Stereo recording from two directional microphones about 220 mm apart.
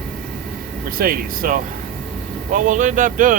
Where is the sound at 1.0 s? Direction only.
40° right (ahead or behind).